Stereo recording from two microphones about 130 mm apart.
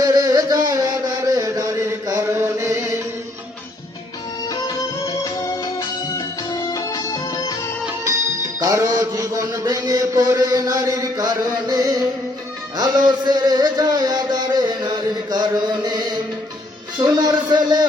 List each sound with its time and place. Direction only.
0.0 s a sound: 25° right (ahead or behind)
5.0 s music: 25° left (ahead or behind)
8.0 s music: 25° right (ahead or behind)